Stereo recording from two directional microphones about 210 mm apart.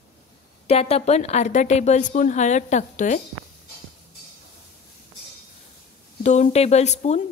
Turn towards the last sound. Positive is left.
turn(degrees=30)  # may be behind; listen again after turning